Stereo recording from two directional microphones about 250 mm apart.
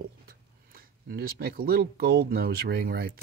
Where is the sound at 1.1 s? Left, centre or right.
Right.